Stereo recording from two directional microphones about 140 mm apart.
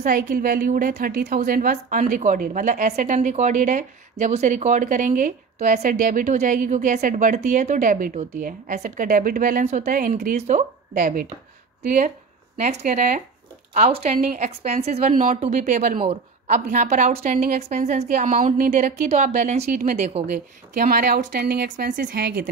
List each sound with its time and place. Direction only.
0.0 s a woman's voice: 90° right
8.7 s a woman's voice: 60° right (ahead or behind); by 9.7 s 85° right
9.7 s a woman's voice: 70° right (ahead or behind)
11.0 s speech: 90° right
12.5 s a woman's voice: 60° right (ahead or behind)
13.7 s a woman's voice: 50° right (ahead or behind)
20.8 s a woman's voice: 85° right